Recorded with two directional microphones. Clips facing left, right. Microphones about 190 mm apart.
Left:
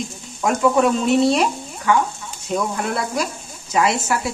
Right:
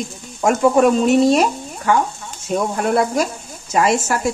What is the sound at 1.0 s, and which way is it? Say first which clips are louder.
Speech: right 3 dB; 45° right (ahead or behind).